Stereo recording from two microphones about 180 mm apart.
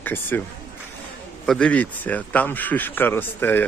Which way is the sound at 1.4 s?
5° left (ahead or behind).